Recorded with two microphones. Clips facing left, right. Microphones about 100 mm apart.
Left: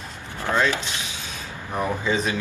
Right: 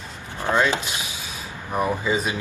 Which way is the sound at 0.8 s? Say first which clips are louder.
Right 1 dB; 10° right (ahead or behind).